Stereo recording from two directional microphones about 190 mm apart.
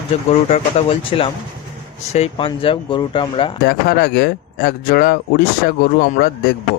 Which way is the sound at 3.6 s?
55° left (ahead or behind).